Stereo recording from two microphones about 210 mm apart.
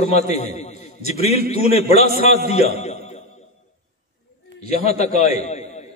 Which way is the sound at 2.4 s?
30° left (ahead or behind).